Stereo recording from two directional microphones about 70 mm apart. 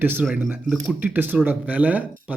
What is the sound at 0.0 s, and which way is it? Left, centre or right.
Speech, right.